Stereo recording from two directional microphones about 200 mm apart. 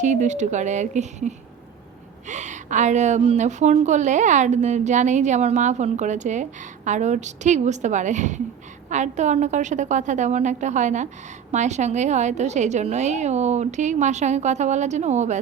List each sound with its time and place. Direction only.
0.0 s a woman's voice: 35° right (ahead or behind)